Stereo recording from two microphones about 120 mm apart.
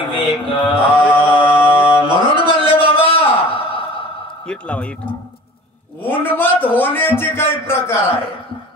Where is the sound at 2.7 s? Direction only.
50° left (ahead or behind).